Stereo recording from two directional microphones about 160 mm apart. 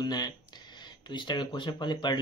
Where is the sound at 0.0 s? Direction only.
25° left (ahead or behind).